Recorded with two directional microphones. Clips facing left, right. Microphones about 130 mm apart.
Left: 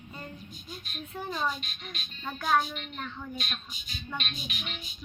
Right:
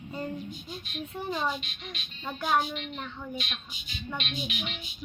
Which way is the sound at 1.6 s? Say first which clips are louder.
Right 1 dB; 40° left (ahead or behind).